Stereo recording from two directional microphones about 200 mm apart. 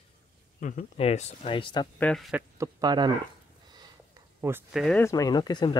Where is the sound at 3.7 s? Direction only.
20° right (ahead or behind).